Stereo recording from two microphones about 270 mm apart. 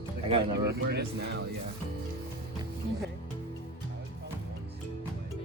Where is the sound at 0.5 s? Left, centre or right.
Right.